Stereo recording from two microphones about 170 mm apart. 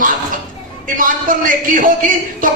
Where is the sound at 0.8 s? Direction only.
50° right (ahead or behind).